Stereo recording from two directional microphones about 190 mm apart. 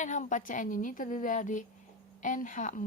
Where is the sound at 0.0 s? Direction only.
40° left (ahead or behind).